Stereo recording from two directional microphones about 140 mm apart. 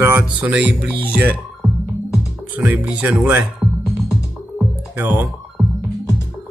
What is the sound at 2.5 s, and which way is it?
Speech, 10° right (ahead or behind).